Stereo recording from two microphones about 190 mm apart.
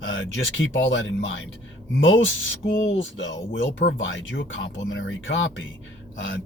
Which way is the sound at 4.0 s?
80° left.